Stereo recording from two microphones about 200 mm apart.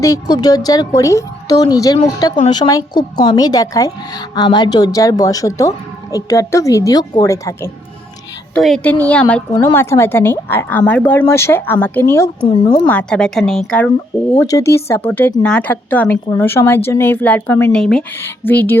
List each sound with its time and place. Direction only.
0.0 s a woman's voice: 15° left (ahead or behind)
8.5 s a woman's voice: 5° left (ahead or behind)
12.5 s a woman's voice: 25° left (ahead or behind)
12.9 s speech: 5° left (ahead or behind)